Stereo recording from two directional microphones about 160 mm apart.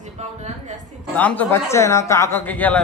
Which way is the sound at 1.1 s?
10° left (ahead or behind).